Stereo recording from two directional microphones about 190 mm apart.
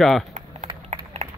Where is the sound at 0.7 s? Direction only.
25° right (ahead or behind).